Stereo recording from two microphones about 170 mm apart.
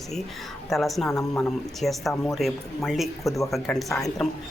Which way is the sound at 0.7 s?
Centre (ahead or behind).